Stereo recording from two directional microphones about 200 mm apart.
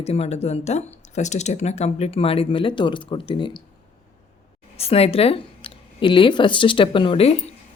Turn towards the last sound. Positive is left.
turn(degrees=25)  # may be behind; listen again after turning